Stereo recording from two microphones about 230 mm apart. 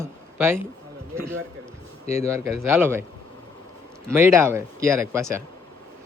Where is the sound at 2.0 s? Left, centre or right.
Left.